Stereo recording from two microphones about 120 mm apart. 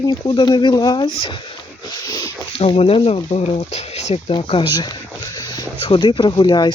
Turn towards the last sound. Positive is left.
turn(degrees=35)  # may be behind; listen again after turning